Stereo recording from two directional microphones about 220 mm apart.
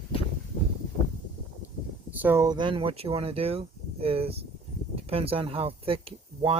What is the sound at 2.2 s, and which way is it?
Speech, 15° right (ahead or behind).